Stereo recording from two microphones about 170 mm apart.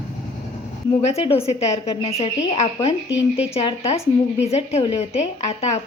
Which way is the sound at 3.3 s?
35° left (ahead or behind).